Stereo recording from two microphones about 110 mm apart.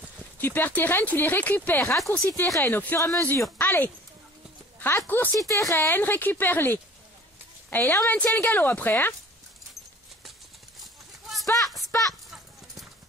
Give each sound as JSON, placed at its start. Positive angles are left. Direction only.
{"t": 0.4, "sound": "speech", "side_deg": 15}
{"t": 5.4, "sound": "speech", "side_deg": 30}
{"t": 10.8, "sound": "clip-clop", "side_deg": 0}
{"t": 11.5, "sound": "a sound", "side_deg": 0}